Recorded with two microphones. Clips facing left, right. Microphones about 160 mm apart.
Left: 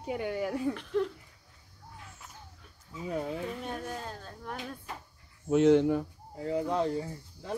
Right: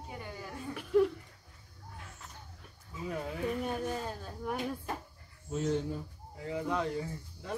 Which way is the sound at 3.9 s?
10° right (ahead or behind).